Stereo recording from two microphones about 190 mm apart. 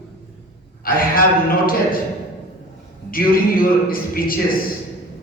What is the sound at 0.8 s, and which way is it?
Speech, 50° left (ahead or behind).